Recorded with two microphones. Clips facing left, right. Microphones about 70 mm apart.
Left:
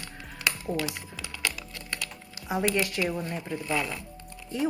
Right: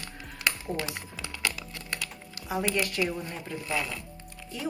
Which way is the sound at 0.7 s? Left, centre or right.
Right.